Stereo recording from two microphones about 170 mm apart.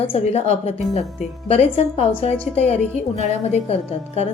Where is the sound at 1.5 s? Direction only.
40° left (ahead or behind).